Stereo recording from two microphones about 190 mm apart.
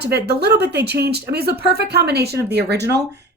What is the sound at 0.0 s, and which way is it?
Speech, 60° right (ahead or behind).